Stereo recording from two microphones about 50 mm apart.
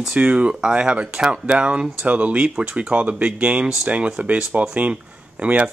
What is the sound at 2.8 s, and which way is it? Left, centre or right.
Speech, right.